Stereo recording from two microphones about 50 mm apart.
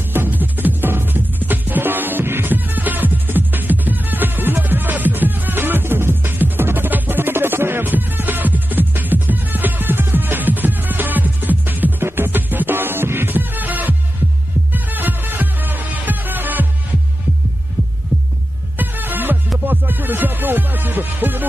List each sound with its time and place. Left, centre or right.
0.1 s music: right
18.8 s music: right